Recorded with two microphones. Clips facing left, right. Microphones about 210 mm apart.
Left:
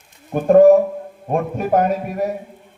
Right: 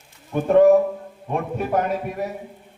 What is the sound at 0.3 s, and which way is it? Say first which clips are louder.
A man's voice: left 4 dB; 45° left (ahead or behind).